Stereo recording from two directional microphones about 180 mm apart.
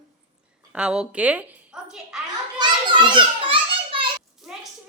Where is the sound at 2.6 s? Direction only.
25° right (ahead or behind).